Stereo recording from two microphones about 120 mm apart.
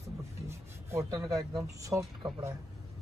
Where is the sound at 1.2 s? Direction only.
35° right (ahead or behind).